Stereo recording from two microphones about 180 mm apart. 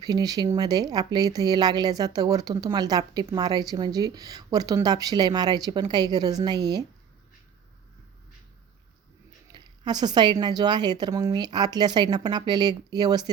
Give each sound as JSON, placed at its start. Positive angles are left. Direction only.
{"t": 0.0, "sound": "speech", "side_deg": -20}
{"t": 9.5, "sound": "speech", "side_deg": -25}